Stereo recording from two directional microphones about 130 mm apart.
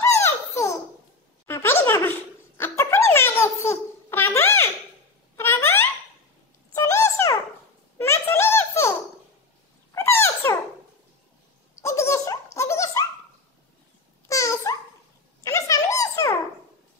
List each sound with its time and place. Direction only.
0.0 s babbling: 20° left (ahead or behind)
1.5 s a sound: 15° left (ahead or behind)
9.9 s dog: 20° left (ahead or behind)
11.8 s giggle: 20° left (ahead or behind)
14.2 s babbling: 25° left (ahead or behind)
15.4 s a sound: 25° left (ahead or behind)